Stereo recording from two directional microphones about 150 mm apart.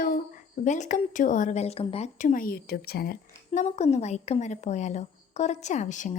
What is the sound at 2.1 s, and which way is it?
A woman's voice, 60° left (ahead or behind).